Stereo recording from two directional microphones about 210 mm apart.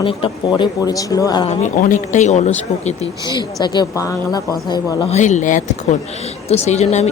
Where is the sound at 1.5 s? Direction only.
35° left (ahead or behind); by 5.1 s 20° left (ahead or behind).